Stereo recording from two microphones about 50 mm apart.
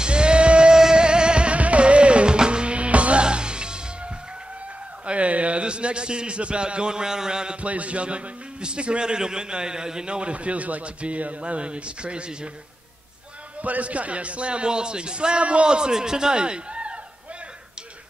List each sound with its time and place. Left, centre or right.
0.0 s music: centre
5.0 s a man's voice: right
7.6 s a man's voice: right
13.6 s a man's voice: right